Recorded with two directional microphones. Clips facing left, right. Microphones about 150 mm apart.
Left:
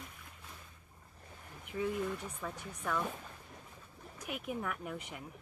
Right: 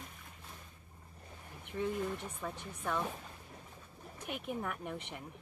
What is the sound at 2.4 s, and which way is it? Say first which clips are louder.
Speech: right 1 dB; 25° right (ahead or behind).